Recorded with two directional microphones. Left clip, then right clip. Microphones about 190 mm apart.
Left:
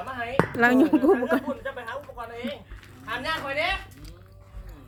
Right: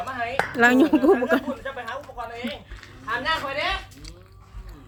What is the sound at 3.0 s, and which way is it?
Speech, 50° left (ahead or behind).